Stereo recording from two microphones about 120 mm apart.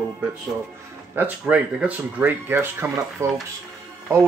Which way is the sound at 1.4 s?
5° right (ahead or behind).